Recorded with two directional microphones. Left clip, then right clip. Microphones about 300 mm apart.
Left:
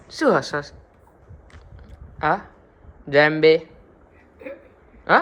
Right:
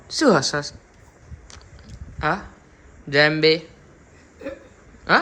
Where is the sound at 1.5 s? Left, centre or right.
Centre.